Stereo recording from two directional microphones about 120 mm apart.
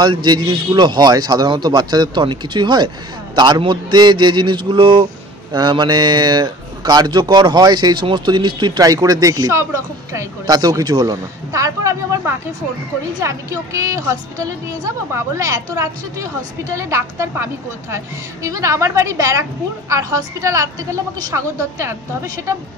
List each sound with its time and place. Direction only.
0.0 s a man's voice: 40° right (ahead or behind)